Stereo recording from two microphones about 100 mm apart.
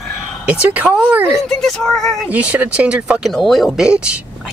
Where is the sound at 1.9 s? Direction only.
Centre (ahead or behind).